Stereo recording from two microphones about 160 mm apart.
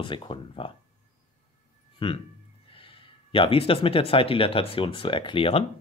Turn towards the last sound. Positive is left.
turn(degrees=35)  # may be behind; listen again after turning